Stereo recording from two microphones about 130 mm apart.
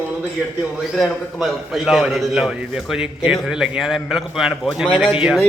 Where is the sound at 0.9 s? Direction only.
Centre (ahead or behind).